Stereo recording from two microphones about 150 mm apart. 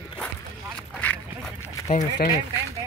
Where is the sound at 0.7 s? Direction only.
10° left (ahead or behind).